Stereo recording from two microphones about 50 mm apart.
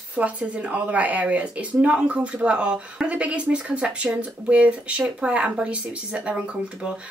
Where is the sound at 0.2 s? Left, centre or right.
Right.